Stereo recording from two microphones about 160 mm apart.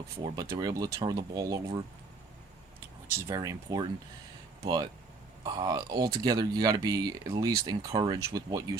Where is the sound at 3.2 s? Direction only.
20° right (ahead or behind).